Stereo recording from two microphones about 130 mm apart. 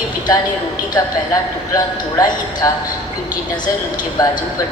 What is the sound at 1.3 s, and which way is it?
A man's voice, 25° left (ahead or behind).